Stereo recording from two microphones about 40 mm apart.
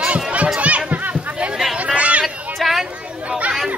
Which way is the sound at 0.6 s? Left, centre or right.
Right.